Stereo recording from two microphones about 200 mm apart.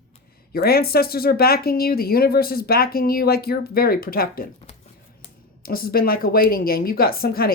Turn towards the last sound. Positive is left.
turn(degrees=50)  # may be behind; listen again after turning